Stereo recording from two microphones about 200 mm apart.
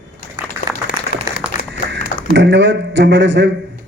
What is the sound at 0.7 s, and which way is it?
Applause, 20° right (ahead or behind).